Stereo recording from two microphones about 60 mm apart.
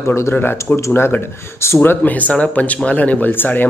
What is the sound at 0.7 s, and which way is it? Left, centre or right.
Speech, left.